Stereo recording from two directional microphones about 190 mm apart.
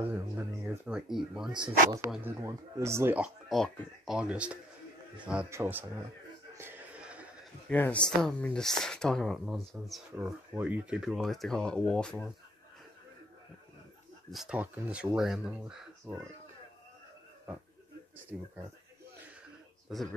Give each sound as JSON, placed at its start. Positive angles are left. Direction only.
{"t": 0.1, "sound": "speech", "side_deg": -10}
{"t": 1.5, "sound": "speech", "side_deg": -25}
{"t": 2.0, "sound": "speech", "side_deg": 0}
{"t": 2.4, "sound": "speech", "side_deg": -15}
{"t": 3.4, "sound": "speech", "side_deg": 0}
{"t": 6.5, "sound": "a sound", "side_deg": -10}
{"t": 7.6, "sound": "speech", "side_deg": 10}
{"t": 14.3, "sound": "speech", "side_deg": -5}
{"t": 18.3, "sound": "speech", "side_deg": -5}